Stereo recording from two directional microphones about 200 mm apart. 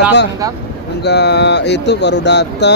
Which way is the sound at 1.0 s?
55° left (ahead or behind).